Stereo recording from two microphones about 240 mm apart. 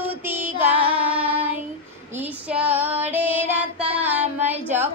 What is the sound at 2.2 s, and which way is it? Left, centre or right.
Child singing, centre.